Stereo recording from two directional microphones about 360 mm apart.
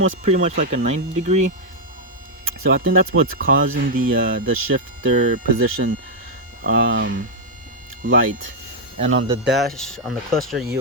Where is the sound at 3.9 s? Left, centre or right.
Right.